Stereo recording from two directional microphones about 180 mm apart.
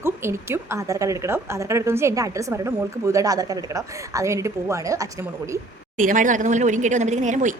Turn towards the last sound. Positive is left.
turn(degrees=-40)  # may be behind; listen again after turning